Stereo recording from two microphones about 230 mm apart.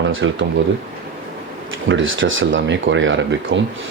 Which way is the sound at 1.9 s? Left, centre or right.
Right.